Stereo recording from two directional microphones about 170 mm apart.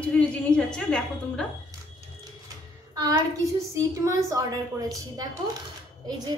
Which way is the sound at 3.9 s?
20° right (ahead or behind).